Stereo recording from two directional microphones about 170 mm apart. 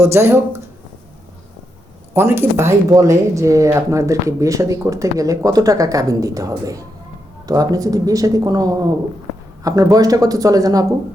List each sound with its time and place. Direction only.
0.0 s speech: 15° right (ahead or behind)
2.1 s speech: 15° right (ahead or behind)